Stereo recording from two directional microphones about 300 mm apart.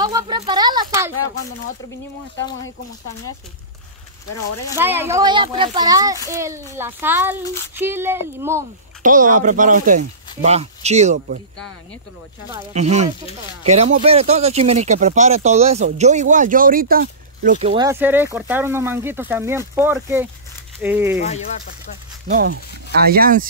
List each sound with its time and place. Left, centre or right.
0.0 s speech: centre
4.7 s speech: centre
9.0 s speech: right
12.7 s speech: right; by 21.2 s centre
21.2 s speech: left
22.3 s speech: right